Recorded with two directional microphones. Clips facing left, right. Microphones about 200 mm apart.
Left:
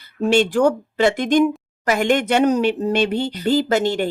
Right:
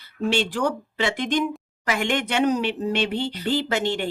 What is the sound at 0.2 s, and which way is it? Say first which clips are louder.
Speech: left 7 dB; 45° left (ahead or behind).